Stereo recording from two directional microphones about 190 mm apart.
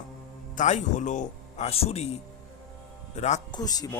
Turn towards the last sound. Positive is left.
turn(degrees=20)  # may be behind; listen again after turning